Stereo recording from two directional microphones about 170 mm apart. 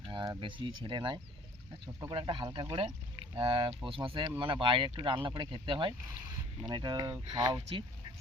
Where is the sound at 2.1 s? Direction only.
30° right (ahead or behind).